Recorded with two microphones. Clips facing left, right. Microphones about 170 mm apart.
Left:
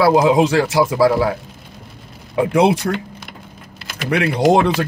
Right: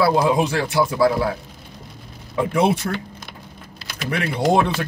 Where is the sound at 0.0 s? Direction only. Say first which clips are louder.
Left 5 dB; 75° left (ahead or behind).